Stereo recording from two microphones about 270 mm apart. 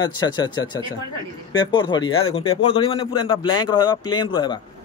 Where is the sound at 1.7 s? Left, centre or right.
Centre.